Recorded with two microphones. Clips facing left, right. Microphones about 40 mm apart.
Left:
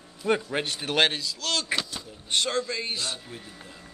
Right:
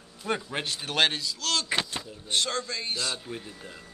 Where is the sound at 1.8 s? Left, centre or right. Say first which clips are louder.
Right 2 dB; right.